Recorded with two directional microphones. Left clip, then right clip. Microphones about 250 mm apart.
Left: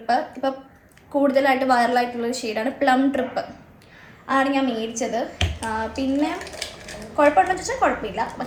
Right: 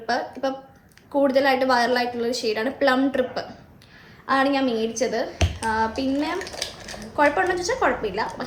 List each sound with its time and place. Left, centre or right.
0.4 s a woman's voice: centre